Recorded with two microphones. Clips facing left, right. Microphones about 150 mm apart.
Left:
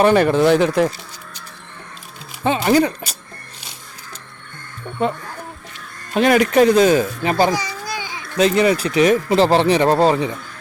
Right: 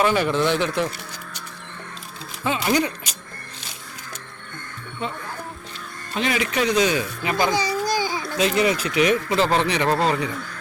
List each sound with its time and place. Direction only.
0.0 s speech: 50° left (ahead or behind)
2.4 s speech: 35° left (ahead or behind)
6.1 s speech: 50° left (ahead or behind)
7.5 s a sound: 35° right (ahead or behind)
8.4 s speech: 35° left (ahead or behind)